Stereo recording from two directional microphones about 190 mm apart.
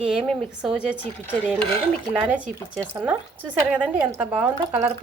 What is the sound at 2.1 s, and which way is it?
Speech, 5° right (ahead or behind).